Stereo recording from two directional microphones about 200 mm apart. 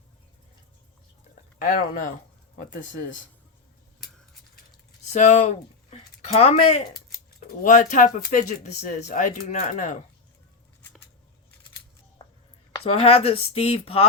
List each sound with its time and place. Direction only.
1.7 s speech: 45° left (ahead or behind)
5.1 s speech: 35° left (ahead or behind)
6.9 s speech: 45° left (ahead or behind)
12.8 s speech: 30° left (ahead or behind)